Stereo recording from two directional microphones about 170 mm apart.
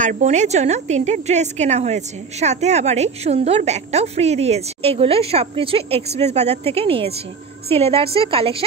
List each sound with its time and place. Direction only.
0.0 s a woman's voice: 45° right (ahead or behind)